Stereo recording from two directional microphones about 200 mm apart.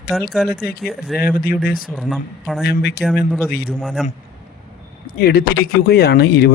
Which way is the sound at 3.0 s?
Centre (ahead or behind).